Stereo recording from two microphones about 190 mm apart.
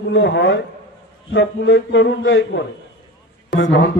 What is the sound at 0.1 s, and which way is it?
A man's voice, 70° left (ahead or behind).